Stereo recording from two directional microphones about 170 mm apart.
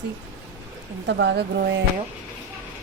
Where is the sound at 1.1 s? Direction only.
90° right; by 1.7 s 75° right (ahead or behind).